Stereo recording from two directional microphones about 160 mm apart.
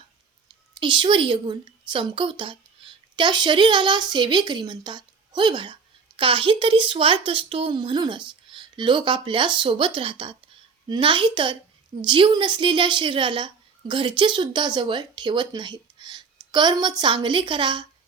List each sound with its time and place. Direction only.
0.8 s a woman's voice: 30° right (ahead or behind)